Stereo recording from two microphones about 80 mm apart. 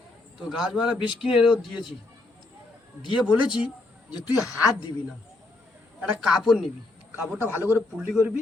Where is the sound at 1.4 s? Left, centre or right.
Left.